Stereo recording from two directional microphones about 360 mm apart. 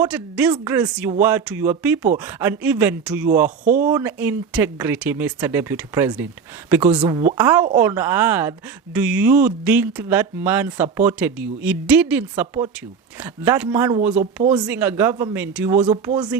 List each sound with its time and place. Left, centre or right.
0.0 s a woman's voice: centre
3.6 s speech: right
3.8 s a woman's voice: centre